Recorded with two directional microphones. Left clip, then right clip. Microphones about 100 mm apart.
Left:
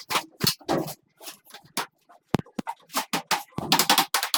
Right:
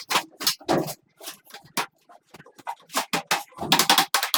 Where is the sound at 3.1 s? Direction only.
Centre (ahead or behind).